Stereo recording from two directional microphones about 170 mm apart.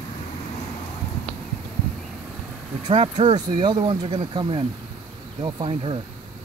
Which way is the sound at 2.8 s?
30° right (ahead or behind).